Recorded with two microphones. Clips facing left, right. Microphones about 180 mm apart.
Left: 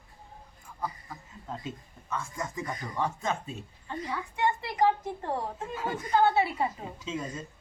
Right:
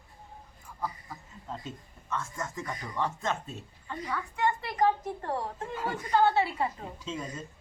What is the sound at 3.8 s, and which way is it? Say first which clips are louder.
A woman's voice: even; 20° left (ahead or behind).